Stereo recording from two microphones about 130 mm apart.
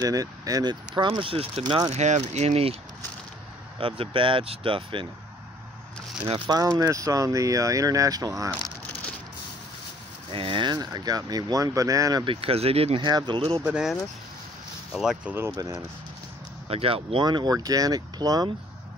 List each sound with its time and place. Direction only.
0.0 s speech: 25° right (ahead or behind); by 1.5 s 45° right (ahead or behind)
1.9 s speech: 55° right (ahead or behind)
4.0 s speech: 40° right (ahead or behind)
6.2 s speech: 45° right (ahead or behind)
6.5 s speech: 30° right (ahead or behind)
10.3 s speech: 40° right (ahead or behind); by 12.3 s 25° right (ahead or behind)
12.3 s speech: 45° right (ahead or behind)
13.0 s speech: 35° right (ahead or behind)
13.7 s speech: 5° right (ahead or behind)
15.0 s speech: 5° right (ahead or behind)
15.3 s speech: 20° right (ahead or behind)
16.6 s speech: 50° right (ahead or behind); by 18.5 s 30° right (ahead or behind)